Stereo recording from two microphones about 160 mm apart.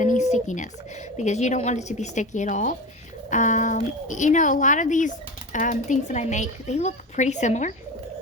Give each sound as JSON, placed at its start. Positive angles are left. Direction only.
{"t": 0.0, "sound": "a woman's voice", "side_deg": 50}